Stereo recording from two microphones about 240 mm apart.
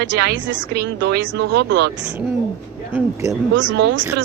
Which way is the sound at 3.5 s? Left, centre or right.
Right.